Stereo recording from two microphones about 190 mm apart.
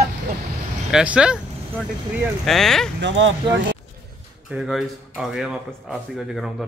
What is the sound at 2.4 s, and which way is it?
Speech, centre (ahead or behind).